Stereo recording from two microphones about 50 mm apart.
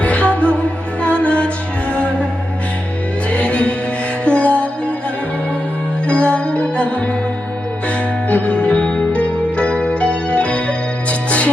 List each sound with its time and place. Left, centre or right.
0.0 s music: left
3.2 s music: left
6.1 s music: left